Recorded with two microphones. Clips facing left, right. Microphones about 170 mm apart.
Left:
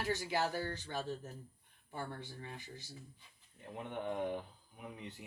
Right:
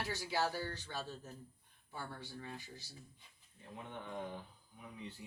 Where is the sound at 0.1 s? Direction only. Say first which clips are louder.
Left 3 dB; 50° left (ahead or behind).